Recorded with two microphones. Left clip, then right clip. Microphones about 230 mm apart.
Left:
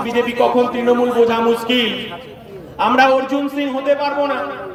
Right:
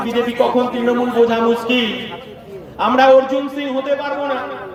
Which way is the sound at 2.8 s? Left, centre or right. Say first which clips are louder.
Right 2 dB; left.